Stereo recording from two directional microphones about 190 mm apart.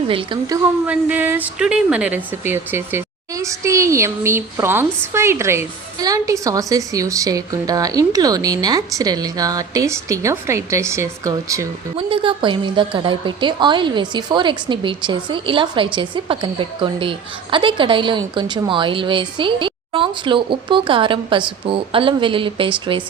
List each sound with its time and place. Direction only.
0.1 s a woman's voice: 25° right (ahead or behind)
0.9 s a woman's voice: 10° right (ahead or behind)
11.9 s a woman's voice: 30° right (ahead or behind)